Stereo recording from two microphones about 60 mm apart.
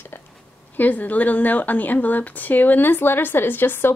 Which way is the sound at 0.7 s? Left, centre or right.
Left.